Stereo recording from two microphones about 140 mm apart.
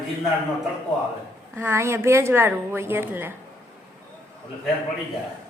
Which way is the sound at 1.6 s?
20° right (ahead or behind).